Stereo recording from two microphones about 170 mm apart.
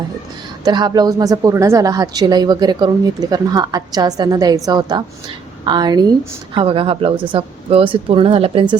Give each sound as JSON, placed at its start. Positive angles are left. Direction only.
{"t": 0.6, "sound": "a woman's voice", "side_deg": -25}